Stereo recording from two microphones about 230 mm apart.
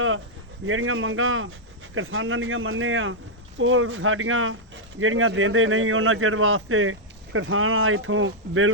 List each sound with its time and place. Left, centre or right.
0.6 s speech: right